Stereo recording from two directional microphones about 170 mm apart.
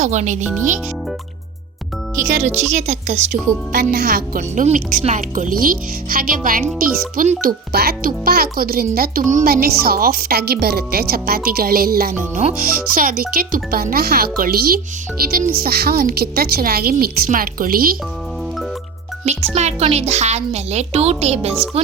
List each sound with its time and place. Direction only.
0.0 s speech: 45° right (ahead or behind)
2.3 s speech: 40° right (ahead or behind)
3.9 s a child's voice: 65° right (ahead or behind)
12.3 s speech: 40° right (ahead or behind)
12.9 s a child's voice: 55° right (ahead or behind)
19.2 s speech: 40° right (ahead or behind)